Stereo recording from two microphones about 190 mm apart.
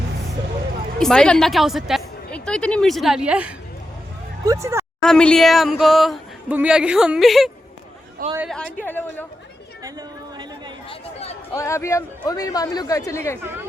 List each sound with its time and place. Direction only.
0.9 s a woman's voice: 5° left (ahead or behind); by 4.9 s 15° right (ahead or behind)
5.0 s a woman's voice: 5° left (ahead or behind)
8.2 s speech: 45° right (ahead or behind)
8.8 s a man's voice: 10° left (ahead or behind)
10.8 s chatter: 35° left (ahead or behind)
11.5 s a man's voice: 15° left (ahead or behind)